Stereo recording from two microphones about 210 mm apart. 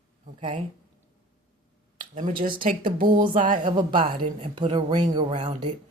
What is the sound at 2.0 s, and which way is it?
Speech, 40° right (ahead or behind).